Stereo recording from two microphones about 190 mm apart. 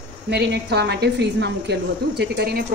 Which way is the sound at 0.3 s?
60° right (ahead or behind).